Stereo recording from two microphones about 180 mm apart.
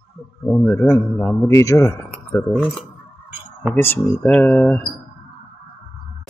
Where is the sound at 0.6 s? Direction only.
15° left (ahead or behind).